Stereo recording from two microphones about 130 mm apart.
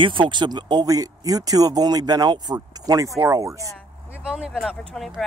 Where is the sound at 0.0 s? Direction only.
40° right (ahead or behind).